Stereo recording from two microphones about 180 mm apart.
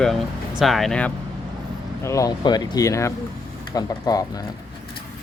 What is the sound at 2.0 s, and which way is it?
Speech, 20° left (ahead or behind).